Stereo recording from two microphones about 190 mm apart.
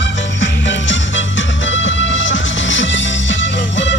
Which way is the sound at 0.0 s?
70° left (ahead or behind).